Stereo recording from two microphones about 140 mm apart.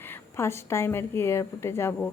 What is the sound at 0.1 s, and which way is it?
A woman's voice, 20° left (ahead or behind).